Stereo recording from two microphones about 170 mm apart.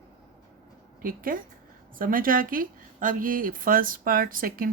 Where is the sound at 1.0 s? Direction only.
55° right (ahead or behind).